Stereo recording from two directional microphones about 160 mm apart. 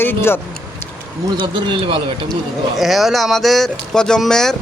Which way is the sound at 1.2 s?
30° right (ahead or behind).